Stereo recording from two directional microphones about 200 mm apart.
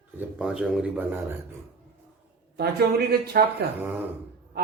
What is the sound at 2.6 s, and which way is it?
A man's voice, 50° right (ahead or behind).